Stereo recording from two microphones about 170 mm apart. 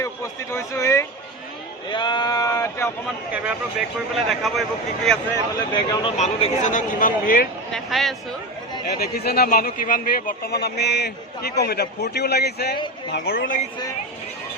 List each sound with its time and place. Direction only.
0.0 s speech: 15° left (ahead or behind)
1.9 s sheep: 25° left (ahead or behind)
3.3 s speech: 10° right (ahead or behind)
5.7 s speech: 30° left (ahead or behind)
6.1 s speech: 40° left (ahead or behind)
7.7 s speech: centre (ahead or behind)
8.9 s speech: 65° left (ahead or behind)